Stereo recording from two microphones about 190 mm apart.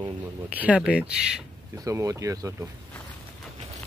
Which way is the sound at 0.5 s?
5° right (ahead or behind).